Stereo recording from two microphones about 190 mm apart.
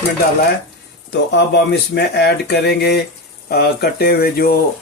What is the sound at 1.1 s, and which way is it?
Speech, 65° left (ahead or behind).